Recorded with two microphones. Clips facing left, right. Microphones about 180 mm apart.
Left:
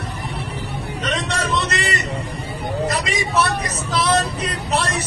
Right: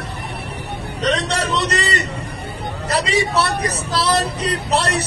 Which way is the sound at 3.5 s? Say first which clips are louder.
Right 2 dB; 70° right (ahead or behind).